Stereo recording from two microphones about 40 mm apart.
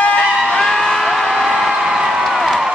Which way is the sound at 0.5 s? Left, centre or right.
Centre.